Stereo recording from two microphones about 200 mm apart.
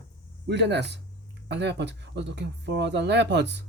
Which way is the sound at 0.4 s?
60° right (ahead or behind).